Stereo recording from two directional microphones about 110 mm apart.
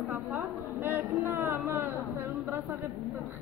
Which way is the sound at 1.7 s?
20° right (ahead or behind).